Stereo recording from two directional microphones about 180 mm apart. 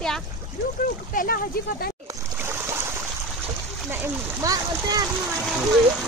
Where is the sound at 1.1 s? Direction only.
55° left (ahead or behind).